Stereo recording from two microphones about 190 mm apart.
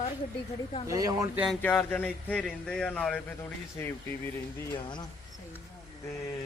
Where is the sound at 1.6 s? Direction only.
10° left (ahead or behind).